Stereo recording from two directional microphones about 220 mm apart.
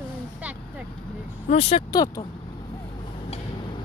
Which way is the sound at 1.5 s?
30° left (ahead or behind).